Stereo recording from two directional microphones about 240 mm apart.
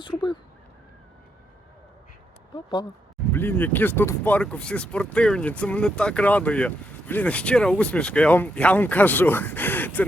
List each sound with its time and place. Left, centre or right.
0.0 s speech: centre
3.3 s speech: centre